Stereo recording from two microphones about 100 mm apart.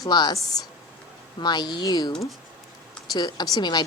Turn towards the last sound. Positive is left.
turn(degrees=45)  # may be behind; listen again after turning